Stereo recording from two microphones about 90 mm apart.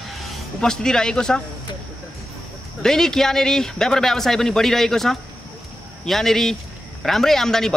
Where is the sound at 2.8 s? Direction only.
5° left (ahead or behind).